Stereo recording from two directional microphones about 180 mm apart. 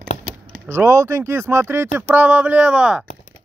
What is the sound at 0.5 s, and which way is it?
Speech, 15° right (ahead or behind).